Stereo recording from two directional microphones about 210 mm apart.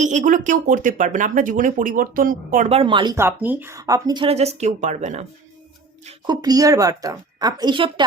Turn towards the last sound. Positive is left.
turn(degrees=-20)  # may be behind; listen again after turning